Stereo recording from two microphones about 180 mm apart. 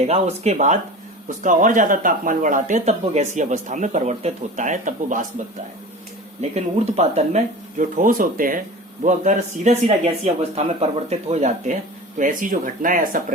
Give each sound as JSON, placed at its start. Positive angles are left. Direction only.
{"t": 0.0, "sound": "speech", "side_deg": -35}
{"t": 6.5, "sound": "speech", "side_deg": -40}